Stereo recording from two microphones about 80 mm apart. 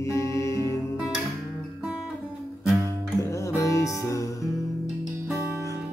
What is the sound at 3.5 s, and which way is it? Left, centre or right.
Music, left.